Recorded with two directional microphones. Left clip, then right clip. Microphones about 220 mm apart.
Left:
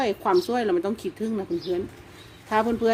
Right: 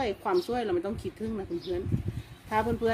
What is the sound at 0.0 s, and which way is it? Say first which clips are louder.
Speech: left 6 dB; 25° left (ahead or behind).